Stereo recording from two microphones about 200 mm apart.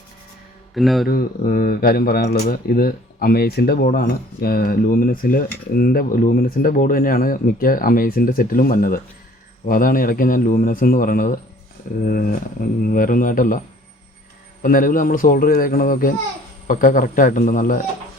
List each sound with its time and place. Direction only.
0.7 s speech: centre (ahead or behind)
1.0 s speech: 45° left (ahead or behind)
14.6 s speech: 45° left (ahead or behind)